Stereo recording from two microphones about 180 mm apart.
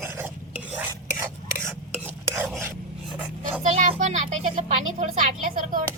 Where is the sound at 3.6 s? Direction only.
45° right (ahead or behind).